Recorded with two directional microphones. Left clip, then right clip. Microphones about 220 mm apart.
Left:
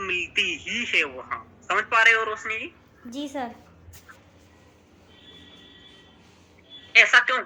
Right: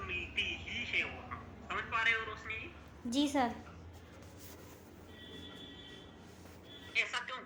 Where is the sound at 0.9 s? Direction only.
40° left (ahead or behind).